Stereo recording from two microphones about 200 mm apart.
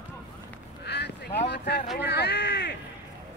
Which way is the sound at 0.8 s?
55° left (ahead or behind).